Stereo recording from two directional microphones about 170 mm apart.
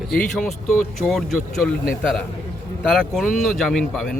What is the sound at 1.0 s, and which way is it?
Speech, centre (ahead or behind).